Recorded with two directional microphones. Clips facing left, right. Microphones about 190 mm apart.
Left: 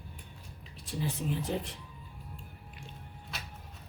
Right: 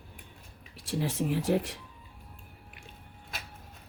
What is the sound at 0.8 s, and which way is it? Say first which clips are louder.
Speech: right 4 dB; 90° right.